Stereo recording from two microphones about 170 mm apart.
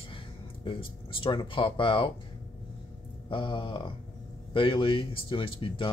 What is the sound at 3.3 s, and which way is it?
Speech, 30° left (ahead or behind).